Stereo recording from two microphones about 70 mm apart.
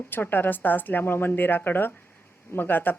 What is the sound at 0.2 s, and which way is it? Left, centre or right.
Speech, left.